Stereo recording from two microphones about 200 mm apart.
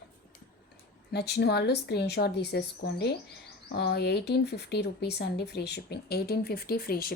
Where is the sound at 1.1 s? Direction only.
55° left (ahead or behind).